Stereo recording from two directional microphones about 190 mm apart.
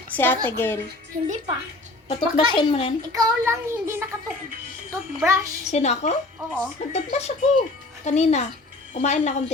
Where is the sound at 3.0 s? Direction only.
15° right (ahead or behind).